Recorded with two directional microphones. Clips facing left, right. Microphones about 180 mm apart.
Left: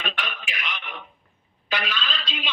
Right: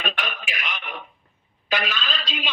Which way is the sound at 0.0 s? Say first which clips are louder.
Right 3 dB; 45° right (ahead or behind).